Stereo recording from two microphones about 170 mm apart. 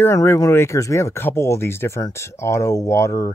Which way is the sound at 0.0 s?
15° left (ahead or behind).